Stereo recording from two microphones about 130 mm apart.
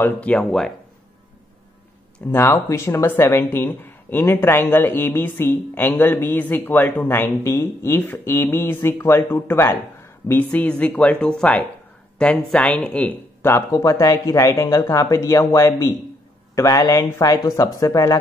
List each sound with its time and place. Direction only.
0.0 s speech: 10° left (ahead or behind)
2.3 s speech: 20° left (ahead or behind)